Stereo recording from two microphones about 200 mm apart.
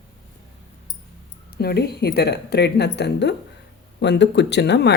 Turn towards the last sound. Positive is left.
turn(degrees=60)  # may be behind; listen again after turning